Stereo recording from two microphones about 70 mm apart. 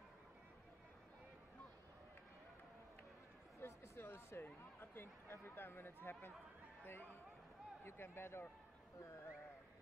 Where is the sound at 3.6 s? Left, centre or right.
Left.